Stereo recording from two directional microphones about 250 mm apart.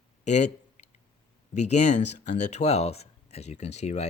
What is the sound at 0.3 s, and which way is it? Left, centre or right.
Speech, left.